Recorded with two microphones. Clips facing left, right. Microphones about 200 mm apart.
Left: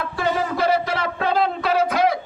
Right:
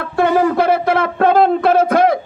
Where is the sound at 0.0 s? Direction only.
55° right (ahead or behind).